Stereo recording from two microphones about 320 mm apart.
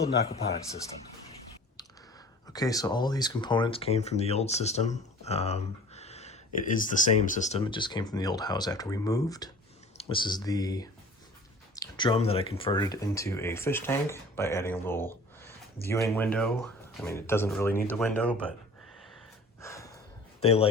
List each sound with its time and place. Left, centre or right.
0.0 s speech: centre
2.5 s speech: centre
19.6 s a sound: centre
20.4 s a man's voice: centre